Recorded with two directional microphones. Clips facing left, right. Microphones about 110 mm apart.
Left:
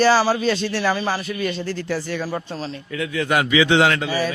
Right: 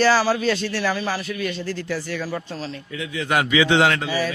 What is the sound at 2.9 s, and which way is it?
Speech, 60° left (ahead or behind).